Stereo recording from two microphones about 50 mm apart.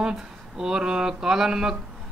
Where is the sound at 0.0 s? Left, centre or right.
Centre.